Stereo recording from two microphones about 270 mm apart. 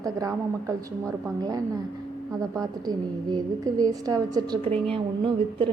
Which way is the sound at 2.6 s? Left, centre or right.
Centre.